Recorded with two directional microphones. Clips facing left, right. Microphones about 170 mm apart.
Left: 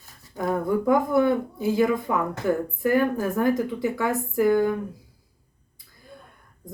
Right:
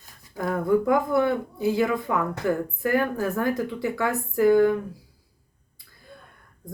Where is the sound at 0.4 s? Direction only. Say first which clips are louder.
Right 1 dB; 20° left (ahead or behind).